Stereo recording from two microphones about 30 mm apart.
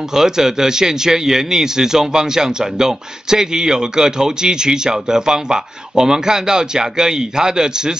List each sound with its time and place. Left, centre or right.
0.1 s speech: centre